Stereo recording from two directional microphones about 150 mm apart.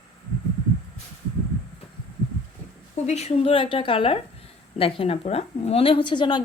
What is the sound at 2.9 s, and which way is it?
A woman's voice, 50° left (ahead or behind).